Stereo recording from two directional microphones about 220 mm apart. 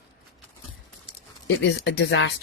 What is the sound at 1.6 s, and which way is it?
Speech, 50° left (ahead or behind).